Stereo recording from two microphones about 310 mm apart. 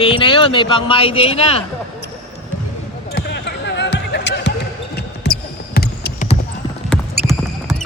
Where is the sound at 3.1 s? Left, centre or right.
Left.